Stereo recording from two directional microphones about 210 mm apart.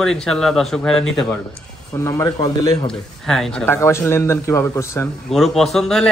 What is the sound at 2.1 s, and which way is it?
Speech, 15° left (ahead or behind).